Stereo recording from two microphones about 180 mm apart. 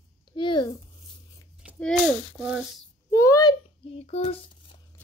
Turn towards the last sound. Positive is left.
turn(degrees=35)  # may be behind; listen again after turning